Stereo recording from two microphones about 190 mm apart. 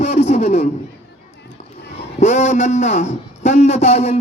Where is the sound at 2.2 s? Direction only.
40° left (ahead or behind).